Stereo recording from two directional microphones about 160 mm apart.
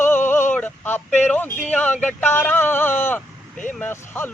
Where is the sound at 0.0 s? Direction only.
10° left (ahead or behind).